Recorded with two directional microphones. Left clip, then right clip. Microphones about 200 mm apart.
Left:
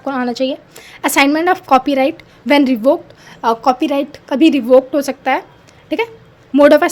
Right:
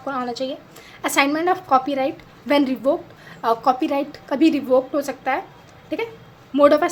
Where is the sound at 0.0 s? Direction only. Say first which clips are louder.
Left 7 dB; 40° left (ahead or behind).